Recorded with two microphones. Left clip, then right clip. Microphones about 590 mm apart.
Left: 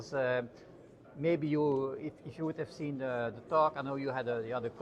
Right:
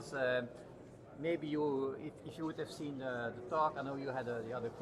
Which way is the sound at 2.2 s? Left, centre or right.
Centre.